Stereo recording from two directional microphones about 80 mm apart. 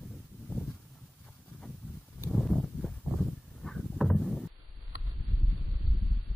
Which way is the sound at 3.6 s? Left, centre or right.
Centre.